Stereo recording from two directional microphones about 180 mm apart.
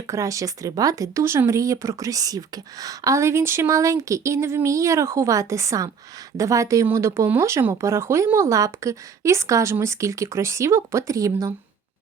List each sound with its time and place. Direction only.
0.1 s speech: 15° right (ahead or behind)